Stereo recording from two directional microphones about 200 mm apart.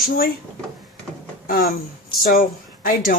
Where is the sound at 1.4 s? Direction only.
50° left (ahead or behind).